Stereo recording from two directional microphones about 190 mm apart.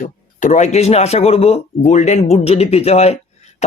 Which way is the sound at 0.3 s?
40° left (ahead or behind).